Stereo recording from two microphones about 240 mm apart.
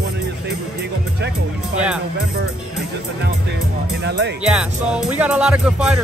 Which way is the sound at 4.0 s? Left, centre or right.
Right.